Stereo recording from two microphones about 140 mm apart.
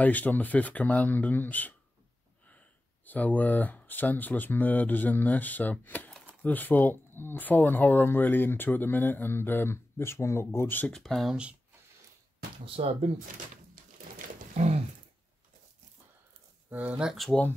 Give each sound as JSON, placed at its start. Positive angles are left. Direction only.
{"t": 0.0, "sound": "speech", "side_deg": 10}
{"t": 3.1, "sound": "speech", "side_deg": 10}
{"t": 11.0, "sound": "speech", "side_deg": 0}
{"t": 12.6, "sound": "speech", "side_deg": -45}
{"t": 14.1, "sound": "roaring cats", "side_deg": -60}
{"t": 16.7, "sound": "speech", "side_deg": -10}